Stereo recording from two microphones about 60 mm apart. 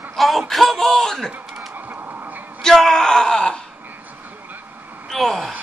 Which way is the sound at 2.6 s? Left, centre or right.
Centre.